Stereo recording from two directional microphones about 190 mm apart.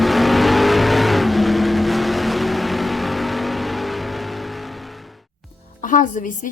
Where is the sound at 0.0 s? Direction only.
Centre (ahead or behind).